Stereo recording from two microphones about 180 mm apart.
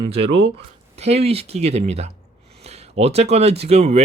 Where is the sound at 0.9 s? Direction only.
35° right (ahead or behind).